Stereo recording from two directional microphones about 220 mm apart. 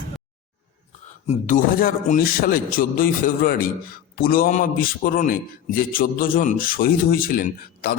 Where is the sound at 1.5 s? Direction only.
35° left (ahead or behind).